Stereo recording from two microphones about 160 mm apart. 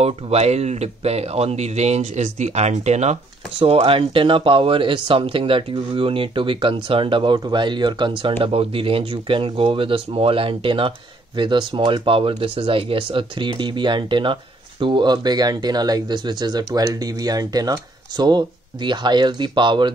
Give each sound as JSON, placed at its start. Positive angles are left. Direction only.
{"t": 0.0, "sound": "speech", "side_deg": -40}